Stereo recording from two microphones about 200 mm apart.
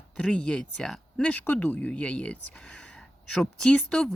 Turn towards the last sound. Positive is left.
turn(degrees=5)  # may be behind; listen again after turning